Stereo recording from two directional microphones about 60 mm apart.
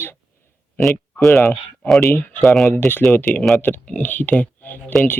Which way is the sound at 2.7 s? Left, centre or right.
Left.